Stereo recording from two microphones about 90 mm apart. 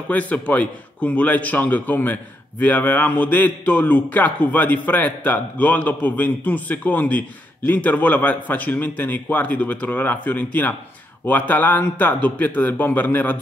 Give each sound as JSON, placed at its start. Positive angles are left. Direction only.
{"t": 0.1, "sound": "a man's voice", "side_deg": 20}